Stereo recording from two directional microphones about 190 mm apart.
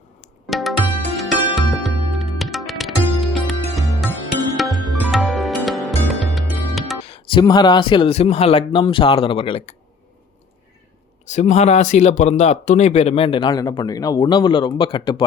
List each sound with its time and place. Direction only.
0.4 s tabla: centre (ahead or behind)
1.1 s music: centre (ahead or behind)
7.0 s speech: 30° left (ahead or behind)
11.3 s speech: 40° left (ahead or behind)